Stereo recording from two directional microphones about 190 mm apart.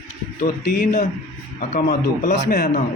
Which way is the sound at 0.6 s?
55° left (ahead or behind).